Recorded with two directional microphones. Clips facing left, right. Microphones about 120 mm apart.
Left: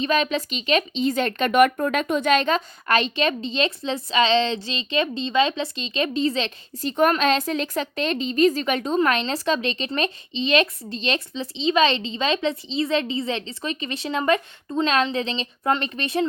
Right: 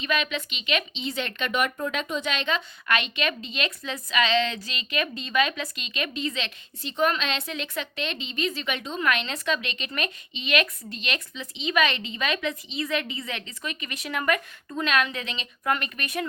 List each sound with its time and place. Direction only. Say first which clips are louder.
0.0 s speech: left 6 dB; 35° left (ahead or behind)
6.9 s a woman's voice: left 6 dB; 50° left (ahead or behind); by 16.2 s 30° left (ahead or behind)